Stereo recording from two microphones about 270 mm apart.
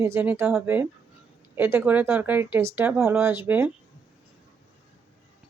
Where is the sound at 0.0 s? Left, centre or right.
Centre.